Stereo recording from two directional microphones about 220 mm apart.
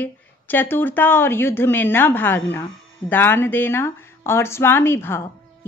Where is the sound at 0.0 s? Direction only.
10° left (ahead or behind).